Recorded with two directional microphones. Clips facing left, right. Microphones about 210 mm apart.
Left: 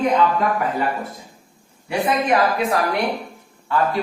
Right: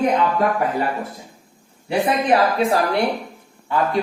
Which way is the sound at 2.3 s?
30° right (ahead or behind).